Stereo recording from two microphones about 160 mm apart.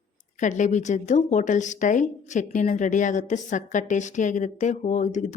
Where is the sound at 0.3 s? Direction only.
50° left (ahead or behind).